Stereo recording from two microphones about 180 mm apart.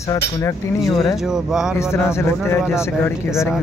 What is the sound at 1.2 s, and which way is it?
Speech, centre (ahead or behind).